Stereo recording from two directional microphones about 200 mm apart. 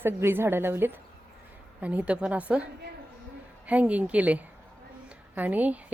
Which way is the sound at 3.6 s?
5° right (ahead or behind).